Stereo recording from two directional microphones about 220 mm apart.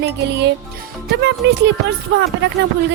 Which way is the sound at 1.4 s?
50° right (ahead or behind).